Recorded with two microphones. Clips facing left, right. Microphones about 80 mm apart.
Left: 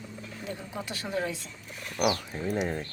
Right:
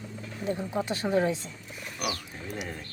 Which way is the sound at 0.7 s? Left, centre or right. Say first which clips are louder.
Right 6 dB; right.